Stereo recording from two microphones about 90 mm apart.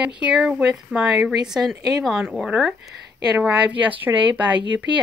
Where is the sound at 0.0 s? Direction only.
10° right (ahead or behind).